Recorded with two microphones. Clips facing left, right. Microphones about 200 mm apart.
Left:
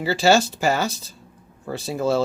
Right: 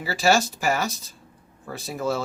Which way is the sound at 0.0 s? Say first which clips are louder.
Left 4 dB; 25° left (ahead or behind).